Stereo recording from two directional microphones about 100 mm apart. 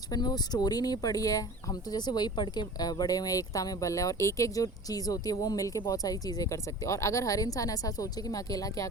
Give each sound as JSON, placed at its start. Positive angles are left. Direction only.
{"t": 0.1, "sound": "speech", "side_deg": 40}